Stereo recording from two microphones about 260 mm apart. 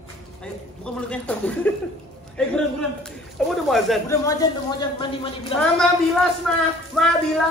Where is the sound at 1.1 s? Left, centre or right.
Centre.